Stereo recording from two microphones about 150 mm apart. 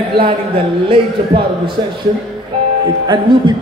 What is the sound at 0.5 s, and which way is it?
Speech, 35° right (ahead or behind).